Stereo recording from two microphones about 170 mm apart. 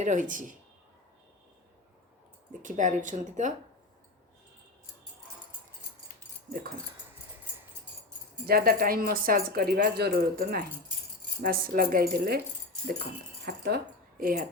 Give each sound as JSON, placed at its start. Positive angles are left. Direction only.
{"t": 0.0, "sound": "speech", "side_deg": -45}
{"t": 2.5, "sound": "speech", "side_deg": -50}
{"t": 8.4, "sound": "speech", "side_deg": -65}
{"t": 13.4, "sound": "speech", "side_deg": -65}